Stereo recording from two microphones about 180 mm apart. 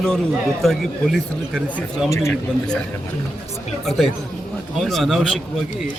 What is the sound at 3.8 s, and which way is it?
Speech, centre (ahead or behind).